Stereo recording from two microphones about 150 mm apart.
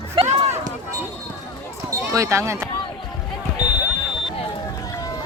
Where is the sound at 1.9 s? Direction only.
20° right (ahead or behind).